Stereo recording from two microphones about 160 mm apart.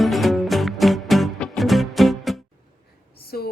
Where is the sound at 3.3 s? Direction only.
70° left (ahead or behind).